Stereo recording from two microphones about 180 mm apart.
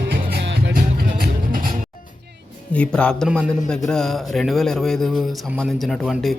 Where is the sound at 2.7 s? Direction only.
5° left (ahead or behind).